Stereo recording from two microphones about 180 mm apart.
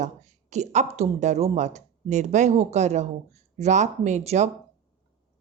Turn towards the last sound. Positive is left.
turn(degrees=-40)  # may be behind; listen again after turning